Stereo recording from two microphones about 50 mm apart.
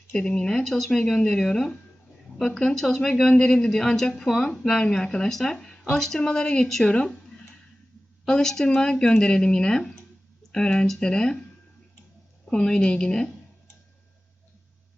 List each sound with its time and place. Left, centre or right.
0.1 s speech: centre
0.5 s speech: centre
4.4 s speech: centre
12.5 s speech: centre